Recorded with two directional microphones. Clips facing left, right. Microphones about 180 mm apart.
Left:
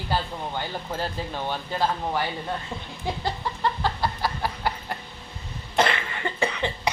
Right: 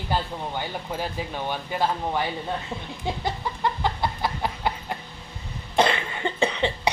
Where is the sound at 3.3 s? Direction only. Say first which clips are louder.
Even; 15° right (ahead or behind).